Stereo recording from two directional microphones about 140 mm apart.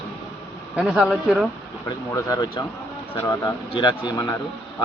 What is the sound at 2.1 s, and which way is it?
Speech, 30° left (ahead or behind).